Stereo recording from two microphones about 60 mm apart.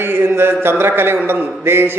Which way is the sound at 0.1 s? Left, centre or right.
Right.